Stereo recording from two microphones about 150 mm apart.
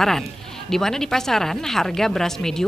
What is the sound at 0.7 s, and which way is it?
Speech, 5° left (ahead or behind).